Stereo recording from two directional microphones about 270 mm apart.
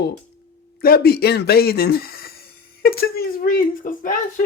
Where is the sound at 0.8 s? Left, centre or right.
Left.